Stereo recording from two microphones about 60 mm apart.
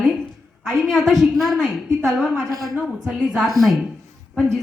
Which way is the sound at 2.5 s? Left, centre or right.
Right.